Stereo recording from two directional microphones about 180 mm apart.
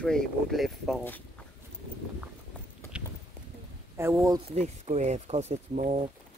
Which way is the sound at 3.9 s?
15° right (ahead or behind).